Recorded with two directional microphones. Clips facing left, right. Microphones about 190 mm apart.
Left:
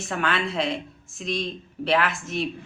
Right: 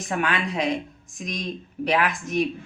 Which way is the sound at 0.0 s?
15° right (ahead or behind).